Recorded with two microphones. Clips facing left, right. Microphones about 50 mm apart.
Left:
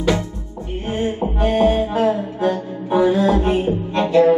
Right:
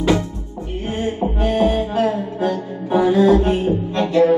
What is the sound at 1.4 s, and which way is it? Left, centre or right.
Music, left.